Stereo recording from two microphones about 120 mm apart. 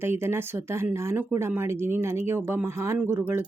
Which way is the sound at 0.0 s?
20° right (ahead or behind).